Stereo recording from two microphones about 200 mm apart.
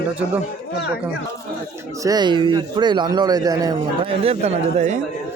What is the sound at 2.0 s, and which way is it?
A man's voice, 20° right (ahead or behind).